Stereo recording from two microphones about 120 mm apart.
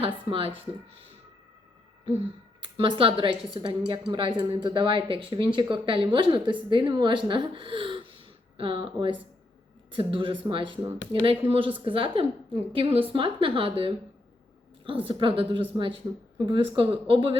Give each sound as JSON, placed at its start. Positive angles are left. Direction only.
{"t": 0.0, "sound": "a woman's voice", "side_deg": -50}
{"t": 2.1, "sound": "a woman's voice", "side_deg": -50}